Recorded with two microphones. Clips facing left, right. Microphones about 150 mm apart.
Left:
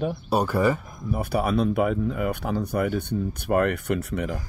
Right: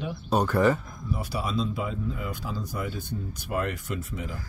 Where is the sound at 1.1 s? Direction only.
55° left (ahead or behind).